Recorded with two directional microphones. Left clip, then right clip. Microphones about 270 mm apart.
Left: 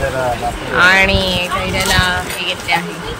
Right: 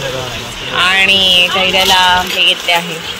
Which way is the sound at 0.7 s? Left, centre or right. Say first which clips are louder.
Right 1 dB; centre.